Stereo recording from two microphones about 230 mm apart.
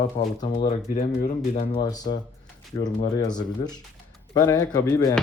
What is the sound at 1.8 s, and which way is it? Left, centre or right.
Speech, centre.